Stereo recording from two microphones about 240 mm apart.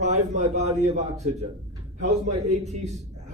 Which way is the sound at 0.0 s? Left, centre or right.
Right.